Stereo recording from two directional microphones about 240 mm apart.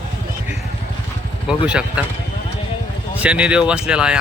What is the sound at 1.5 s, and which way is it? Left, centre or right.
Speech, centre.